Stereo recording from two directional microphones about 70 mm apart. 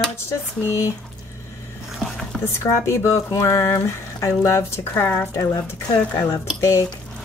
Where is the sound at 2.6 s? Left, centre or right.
Left.